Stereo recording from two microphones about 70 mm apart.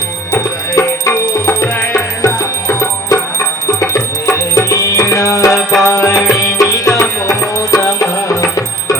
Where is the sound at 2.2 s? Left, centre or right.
Left.